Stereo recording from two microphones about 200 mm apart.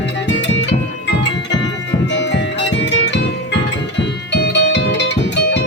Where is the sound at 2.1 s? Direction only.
60° left (ahead or behind).